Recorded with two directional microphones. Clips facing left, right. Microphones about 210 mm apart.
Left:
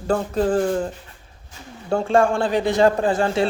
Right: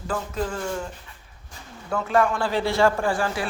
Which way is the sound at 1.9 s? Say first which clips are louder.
Left 4 dB; 30° left (ahead or behind).